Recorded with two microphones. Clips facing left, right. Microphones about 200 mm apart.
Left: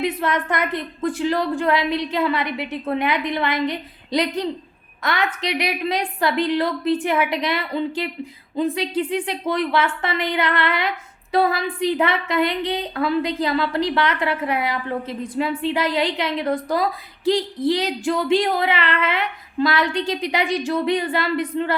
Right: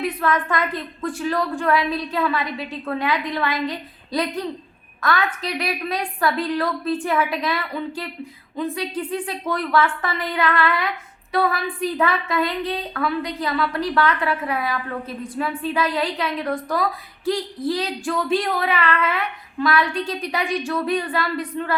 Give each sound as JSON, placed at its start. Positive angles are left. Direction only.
{"t": 0.0, "sound": "a woman's voice", "side_deg": 20}
{"t": 5.5, "sound": "a woman's voice", "side_deg": 20}